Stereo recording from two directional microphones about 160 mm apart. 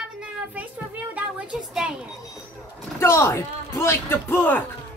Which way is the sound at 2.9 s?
15° left (ahead or behind).